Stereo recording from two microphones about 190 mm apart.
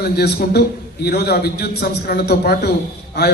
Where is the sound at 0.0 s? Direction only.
55° left (ahead or behind).